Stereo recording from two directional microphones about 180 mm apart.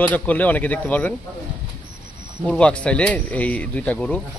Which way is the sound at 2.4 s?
5° left (ahead or behind).